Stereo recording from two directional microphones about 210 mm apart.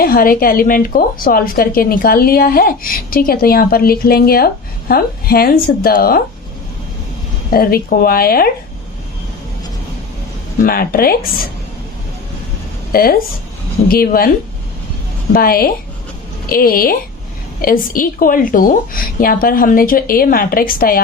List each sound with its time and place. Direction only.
0.0 s a woman's voice: 45° left (ahead or behind)
7.5 s a woman's voice: 45° left (ahead or behind)
10.6 s a woman's voice: 45° left (ahead or behind)
12.9 s a woman's voice: 45° left (ahead or behind)
15.3 s a woman's voice: 45° left (ahead or behind)